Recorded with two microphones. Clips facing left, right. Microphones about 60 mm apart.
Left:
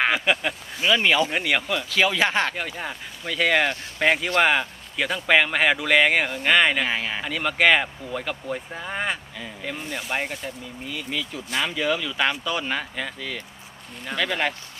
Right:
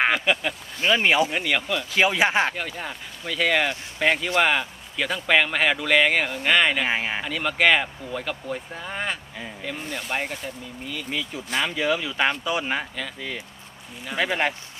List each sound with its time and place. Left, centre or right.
0.1 s speech: centre
0.9 s speech: centre
1.3 s speech: centre
1.9 s speech: centre
2.6 s speech: centre
6.8 s speech: centre
7.2 s speech: centre
11.1 s speech: centre